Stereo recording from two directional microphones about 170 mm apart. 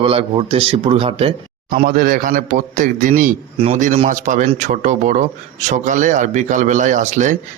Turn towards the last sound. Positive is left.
turn(degrees=-45)  # may be behind; listen again after turning